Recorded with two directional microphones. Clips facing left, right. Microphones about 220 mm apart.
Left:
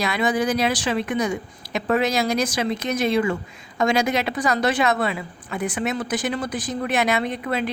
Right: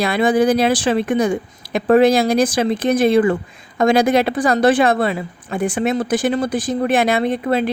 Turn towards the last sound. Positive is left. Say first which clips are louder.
# right 7 dB
turn(degrees=-30)  # may be behind; listen again after turning